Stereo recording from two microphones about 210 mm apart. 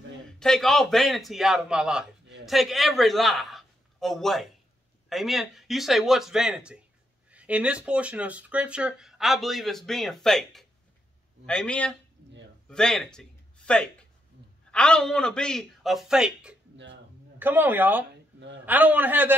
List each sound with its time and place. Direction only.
0.4 s a man's voice: centre (ahead or behind)
16.7 s a sound: 60° right (ahead or behind)
17.4 s a man's voice: 10° right (ahead or behind)